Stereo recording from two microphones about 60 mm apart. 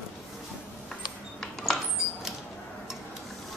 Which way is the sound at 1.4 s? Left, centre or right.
Centre.